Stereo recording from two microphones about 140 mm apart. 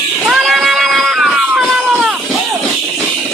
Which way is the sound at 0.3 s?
Centre (ahead or behind).